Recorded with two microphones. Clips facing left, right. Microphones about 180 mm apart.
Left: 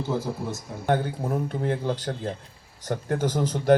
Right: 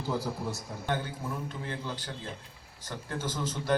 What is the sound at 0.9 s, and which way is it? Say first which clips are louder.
A man's voice: left 9 dB; 55° left (ahead or behind).